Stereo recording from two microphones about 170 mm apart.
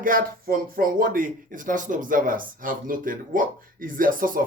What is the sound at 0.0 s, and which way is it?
Speech, 55° right (ahead or behind).